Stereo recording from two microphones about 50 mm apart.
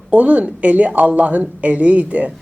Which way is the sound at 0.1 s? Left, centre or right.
Right.